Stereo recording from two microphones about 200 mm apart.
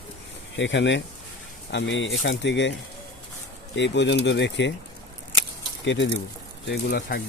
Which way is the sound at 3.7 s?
60° left (ahead or behind).